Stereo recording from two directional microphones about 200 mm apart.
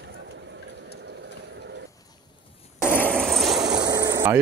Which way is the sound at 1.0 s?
60° right (ahead or behind).